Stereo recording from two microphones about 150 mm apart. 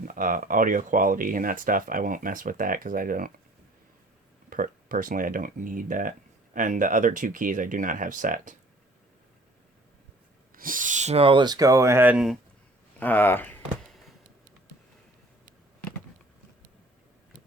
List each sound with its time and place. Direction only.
0.0 s speech: 65° right (ahead or behind)
4.4 s speech: 65° right (ahead or behind)
10.5 s speech: 65° right (ahead or behind); by 12.4 s 5° right (ahead or behind)
13.0 s speech: 10° left (ahead or behind)